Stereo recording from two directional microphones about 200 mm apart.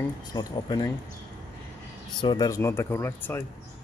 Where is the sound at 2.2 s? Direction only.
20° left (ahead or behind).